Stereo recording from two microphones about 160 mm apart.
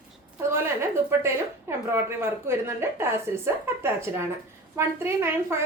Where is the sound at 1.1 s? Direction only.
15° right (ahead or behind).